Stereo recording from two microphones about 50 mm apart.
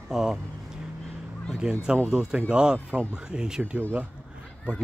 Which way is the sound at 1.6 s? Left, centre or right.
Centre.